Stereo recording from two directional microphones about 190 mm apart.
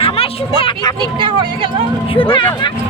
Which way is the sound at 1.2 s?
30° right (ahead or behind).